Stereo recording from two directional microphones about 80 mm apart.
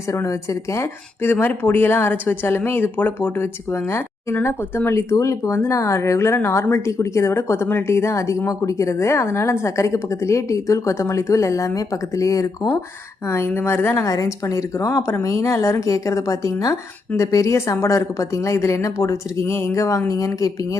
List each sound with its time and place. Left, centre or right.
0.1 s speech: left
1.2 s speech: left
13.9 s speech: left